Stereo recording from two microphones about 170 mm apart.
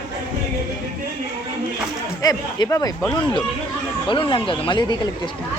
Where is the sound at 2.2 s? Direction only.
20° left (ahead or behind).